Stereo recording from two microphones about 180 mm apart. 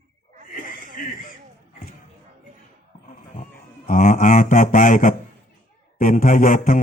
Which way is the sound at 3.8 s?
45° left (ahead or behind).